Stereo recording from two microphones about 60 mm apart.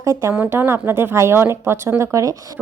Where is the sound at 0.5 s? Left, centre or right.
Right.